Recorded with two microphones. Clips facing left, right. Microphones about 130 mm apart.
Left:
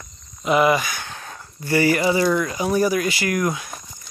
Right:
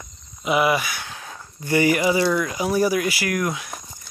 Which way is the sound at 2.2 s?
Centre (ahead or behind).